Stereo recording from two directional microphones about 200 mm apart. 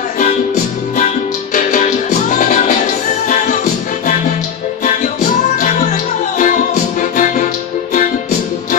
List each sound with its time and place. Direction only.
1.5 s music: 40° left (ahead or behind)
5.6 s music: 40° left (ahead or behind)